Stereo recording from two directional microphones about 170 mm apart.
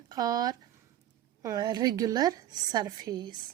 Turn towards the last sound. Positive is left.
turn(degrees=-25)  # may be behind; listen again after turning